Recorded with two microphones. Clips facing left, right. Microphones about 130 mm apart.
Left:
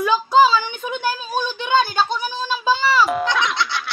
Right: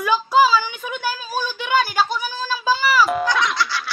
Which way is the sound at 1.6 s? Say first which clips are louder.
Left 1 dB; 25° left (ahead or behind).